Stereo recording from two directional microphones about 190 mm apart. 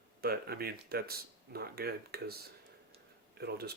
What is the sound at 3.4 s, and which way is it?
Speech, 55° right (ahead or behind).